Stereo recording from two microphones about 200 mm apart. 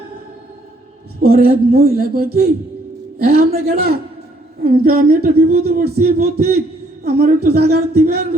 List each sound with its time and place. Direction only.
1.2 s speech: 50° right (ahead or behind)